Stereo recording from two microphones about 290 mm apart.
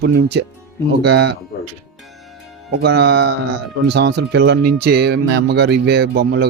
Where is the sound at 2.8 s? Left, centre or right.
Right.